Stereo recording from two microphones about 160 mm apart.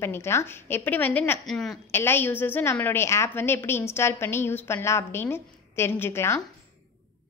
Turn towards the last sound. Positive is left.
turn(degrees=15)  # may be behind; listen again after turning